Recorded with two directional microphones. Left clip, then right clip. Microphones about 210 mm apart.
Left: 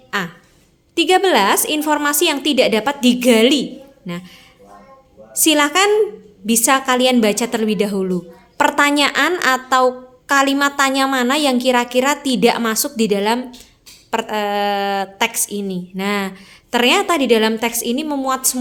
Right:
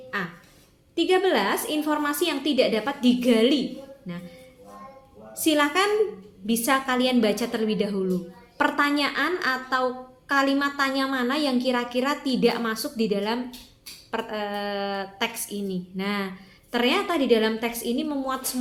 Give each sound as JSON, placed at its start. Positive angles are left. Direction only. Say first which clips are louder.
{"t": 0.1, "sound": "a woman's voice", "louder": "left 8 dB", "side_deg": 45}
{"t": 5.4, "sound": "a woman's voice", "louder": "left 8 dB", "side_deg": 40}